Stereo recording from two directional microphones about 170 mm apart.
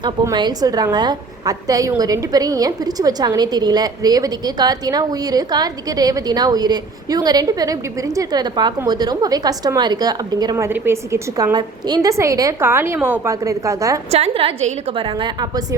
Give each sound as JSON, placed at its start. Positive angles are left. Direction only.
{"t": 0.0, "sound": "a woman's voice", "side_deg": -25}
{"t": 14.1, "sound": "a woman's voice", "side_deg": -35}